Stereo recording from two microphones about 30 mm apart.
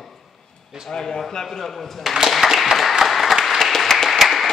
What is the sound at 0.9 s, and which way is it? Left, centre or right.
A man's voice, left.